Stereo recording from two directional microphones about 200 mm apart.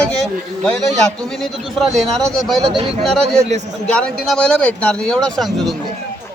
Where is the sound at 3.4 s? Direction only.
35° right (ahead or behind).